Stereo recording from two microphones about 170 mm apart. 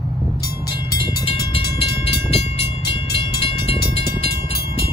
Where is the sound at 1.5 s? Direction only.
35° left (ahead or behind).